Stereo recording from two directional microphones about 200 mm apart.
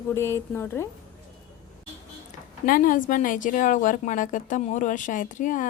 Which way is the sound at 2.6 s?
45° left (ahead or behind).